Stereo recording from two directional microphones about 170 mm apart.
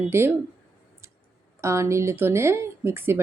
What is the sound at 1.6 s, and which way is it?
Speech, 15° right (ahead or behind).